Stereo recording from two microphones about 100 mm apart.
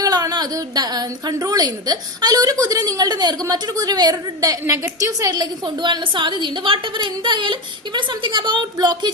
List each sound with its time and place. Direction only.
0.0 s a woman's voice: 40° right (ahead or behind)
5.3 s a woman's voice: 45° right (ahead or behind)